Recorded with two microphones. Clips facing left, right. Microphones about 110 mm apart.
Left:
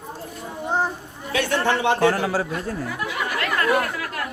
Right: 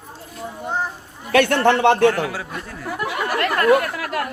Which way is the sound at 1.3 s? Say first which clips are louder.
Right 6 dB; 60° right (ahead or behind).